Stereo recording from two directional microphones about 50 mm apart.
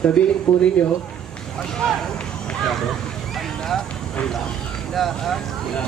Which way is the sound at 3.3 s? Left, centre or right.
Centre.